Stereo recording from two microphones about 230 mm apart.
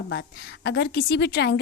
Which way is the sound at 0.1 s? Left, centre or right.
Left.